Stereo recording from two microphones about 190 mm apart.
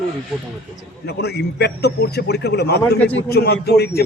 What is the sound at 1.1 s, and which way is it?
A man's voice, 60° left (ahead or behind).